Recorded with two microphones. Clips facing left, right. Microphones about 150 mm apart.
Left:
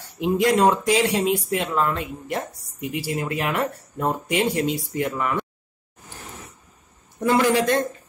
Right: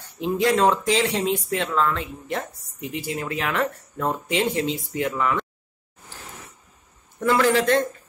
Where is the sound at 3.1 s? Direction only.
10° left (ahead or behind).